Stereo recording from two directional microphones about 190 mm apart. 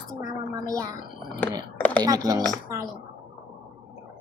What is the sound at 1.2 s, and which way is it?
Speech, 5° left (ahead or behind).